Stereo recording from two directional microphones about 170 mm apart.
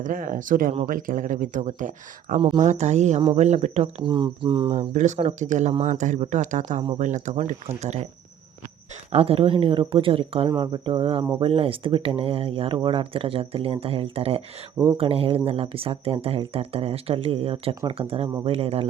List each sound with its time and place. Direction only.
0.0 s speech: 50° right (ahead or behind)
2.4 s speech: 25° right (ahead or behind)
2.6 s speech: 40° right (ahead or behind)
4.0 s speech: 30° right (ahead or behind)
4.7 s speech: 45° right (ahead or behind)
9.1 s speech: 35° right (ahead or behind)